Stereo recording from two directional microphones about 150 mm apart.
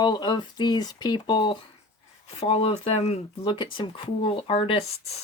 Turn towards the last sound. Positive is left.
turn(degrees=40)  # may be behind; listen again after turning